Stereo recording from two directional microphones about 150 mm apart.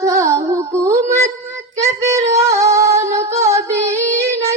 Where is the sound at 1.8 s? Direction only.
20° right (ahead or behind).